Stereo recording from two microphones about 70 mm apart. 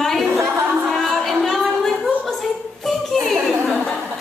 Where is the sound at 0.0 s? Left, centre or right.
Centre.